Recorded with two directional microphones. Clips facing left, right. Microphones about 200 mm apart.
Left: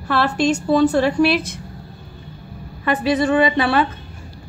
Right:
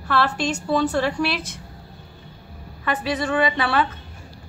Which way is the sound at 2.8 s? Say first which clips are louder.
Left 6 dB; 20° left (ahead or behind).